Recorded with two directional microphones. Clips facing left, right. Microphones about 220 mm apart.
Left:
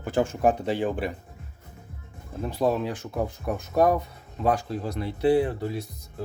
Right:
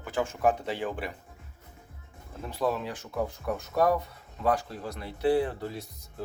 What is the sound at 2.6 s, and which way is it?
Speech, 15° left (ahead or behind).